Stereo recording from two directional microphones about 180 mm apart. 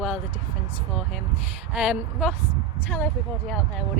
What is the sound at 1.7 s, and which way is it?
Speech, 5° right (ahead or behind).